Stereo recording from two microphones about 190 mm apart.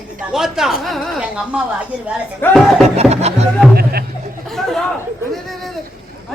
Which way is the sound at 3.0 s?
35° right (ahead or behind).